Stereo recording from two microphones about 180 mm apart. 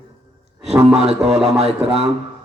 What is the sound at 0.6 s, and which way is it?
A man's voice, 35° right (ahead or behind).